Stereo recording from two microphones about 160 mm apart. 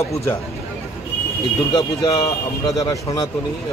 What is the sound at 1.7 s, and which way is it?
A man's voice, 25° left (ahead or behind).